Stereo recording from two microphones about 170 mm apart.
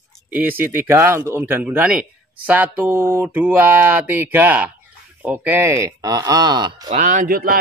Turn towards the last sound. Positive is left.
turn(degrees=-55)  # may be behind; listen again after turning